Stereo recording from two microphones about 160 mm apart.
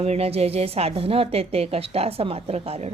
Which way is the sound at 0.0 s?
40° right (ahead or behind).